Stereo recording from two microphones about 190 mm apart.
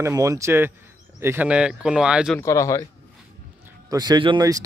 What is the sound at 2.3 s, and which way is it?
Speech, 15° left (ahead or behind).